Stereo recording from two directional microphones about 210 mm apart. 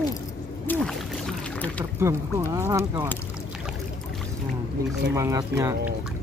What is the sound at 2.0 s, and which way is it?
Speech, 15° right (ahead or behind).